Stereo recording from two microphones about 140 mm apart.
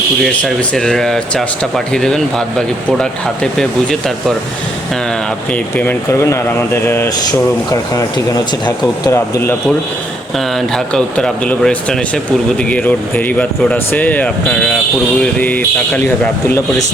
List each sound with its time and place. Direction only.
0.2 s speech: 5° left (ahead or behind)
5.7 s speech: 15° left (ahead or behind)
7.3 s speech: 25° left (ahead or behind)
10.9 s speech: 5° left (ahead or behind)